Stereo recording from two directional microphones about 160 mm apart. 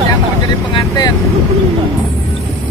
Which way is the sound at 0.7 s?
25° left (ahead or behind).